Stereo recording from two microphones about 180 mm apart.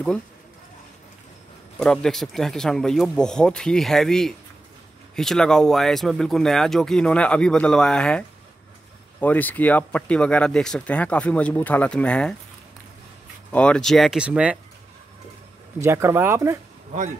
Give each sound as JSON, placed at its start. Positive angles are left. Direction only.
{"t": 1.8, "sound": "speech", "side_deg": 5}
{"t": 13.5, "sound": "speech", "side_deg": 5}
{"t": 15.8, "sound": "speech", "side_deg": -15}